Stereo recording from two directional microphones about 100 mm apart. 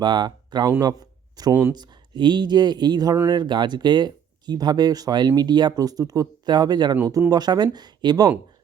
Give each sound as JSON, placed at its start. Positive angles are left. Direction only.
{"t": 0.0, "sound": "speech", "side_deg": -50}
{"t": 0.8, "sound": "a sound", "side_deg": -40}
{"t": 1.7, "sound": "speech", "side_deg": -45}